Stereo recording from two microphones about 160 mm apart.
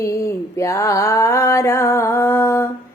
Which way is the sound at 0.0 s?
20° left (ahead or behind).